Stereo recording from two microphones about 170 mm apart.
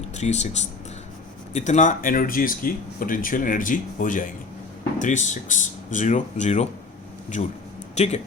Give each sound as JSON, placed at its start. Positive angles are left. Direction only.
{"t": 0.2, "sound": "speech", "side_deg": 40}
{"t": 7.9, "sound": "speech", "side_deg": 40}